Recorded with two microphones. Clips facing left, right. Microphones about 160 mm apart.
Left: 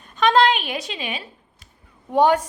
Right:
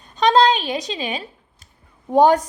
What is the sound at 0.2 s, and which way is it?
A child's voice, 35° right (ahead or behind).